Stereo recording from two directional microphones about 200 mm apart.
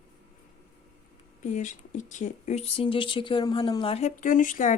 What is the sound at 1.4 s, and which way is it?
Speech, 40° left (ahead or behind).